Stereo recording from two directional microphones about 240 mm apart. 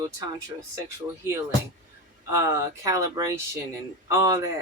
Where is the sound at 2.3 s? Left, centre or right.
Centre.